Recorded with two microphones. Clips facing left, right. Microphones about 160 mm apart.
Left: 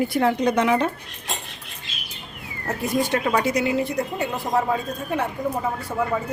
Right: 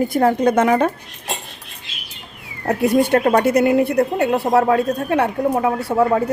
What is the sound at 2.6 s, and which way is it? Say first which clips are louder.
A woman's voice: right 8 dB; 65° right (ahead or behind).